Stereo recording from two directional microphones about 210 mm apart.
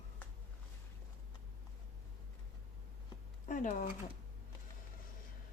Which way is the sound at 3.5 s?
35° left (ahead or behind).